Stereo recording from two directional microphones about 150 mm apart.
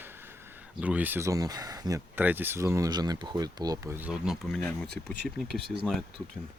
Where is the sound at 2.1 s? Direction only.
15° right (ahead or behind).